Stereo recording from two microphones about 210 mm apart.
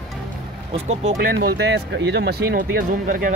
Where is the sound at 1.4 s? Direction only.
55° right (ahead or behind).